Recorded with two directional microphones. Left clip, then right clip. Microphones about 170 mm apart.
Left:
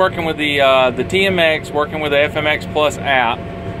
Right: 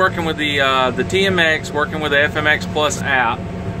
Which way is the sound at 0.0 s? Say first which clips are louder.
Left 1 dB; 15° right (ahead or behind).